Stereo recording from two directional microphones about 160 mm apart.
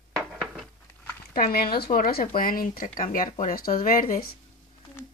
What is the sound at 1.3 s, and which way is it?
Speech, 65° left (ahead or behind).